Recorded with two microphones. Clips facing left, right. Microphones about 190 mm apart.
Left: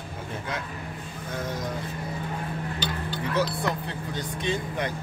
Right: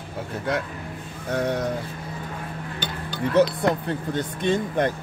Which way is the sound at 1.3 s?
70° right (ahead or behind).